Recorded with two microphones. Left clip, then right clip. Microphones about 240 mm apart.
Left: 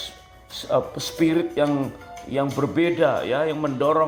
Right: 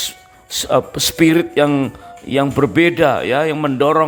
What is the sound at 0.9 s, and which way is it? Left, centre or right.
Speech, right.